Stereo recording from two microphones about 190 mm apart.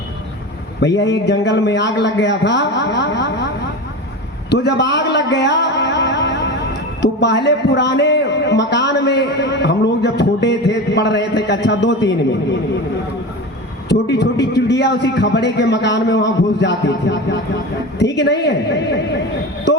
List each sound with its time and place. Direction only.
0.9 s a man's voice: 65° left (ahead or behind)
4.4 s a man's voice: 65° left (ahead or behind)
13.8 s a man's voice: 60° left (ahead or behind)